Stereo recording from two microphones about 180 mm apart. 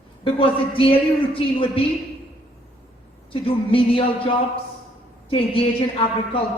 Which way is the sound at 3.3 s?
30° left (ahead or behind).